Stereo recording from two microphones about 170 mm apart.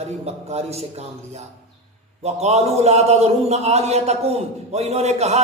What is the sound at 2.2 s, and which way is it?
A man's voice, 40° right (ahead or behind).